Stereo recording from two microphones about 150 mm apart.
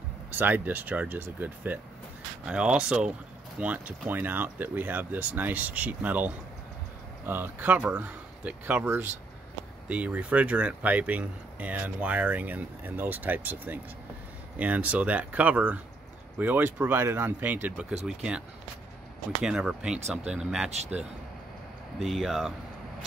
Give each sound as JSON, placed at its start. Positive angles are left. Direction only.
{"t": 0.3, "sound": "speech", "side_deg": -10}
{"t": 19.4, "sound": "speech", "side_deg": -5}
{"t": 21.9, "sound": "speech", "side_deg": 0}